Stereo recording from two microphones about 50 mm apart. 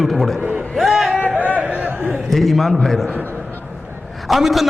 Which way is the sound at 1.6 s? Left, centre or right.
Right.